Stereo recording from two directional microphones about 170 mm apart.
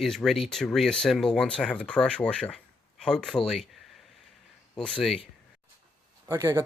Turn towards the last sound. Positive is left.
turn(degrees=-15)  # may be behind; listen again after turning